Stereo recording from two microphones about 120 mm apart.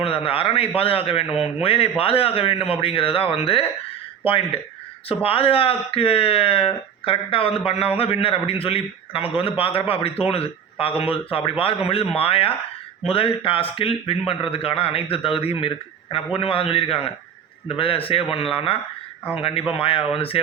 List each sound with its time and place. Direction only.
0.0 s speech: 50° left (ahead or behind)